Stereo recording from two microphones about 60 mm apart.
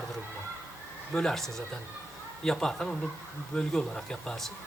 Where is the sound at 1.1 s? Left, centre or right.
Centre.